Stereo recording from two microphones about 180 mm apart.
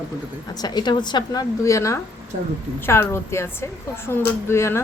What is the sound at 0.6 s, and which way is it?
A woman's voice, 25° left (ahead or behind).